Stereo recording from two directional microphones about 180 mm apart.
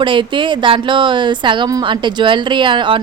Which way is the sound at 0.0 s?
25° right (ahead or behind).